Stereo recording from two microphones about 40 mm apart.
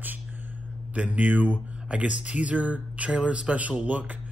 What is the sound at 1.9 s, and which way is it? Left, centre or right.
Speech, right.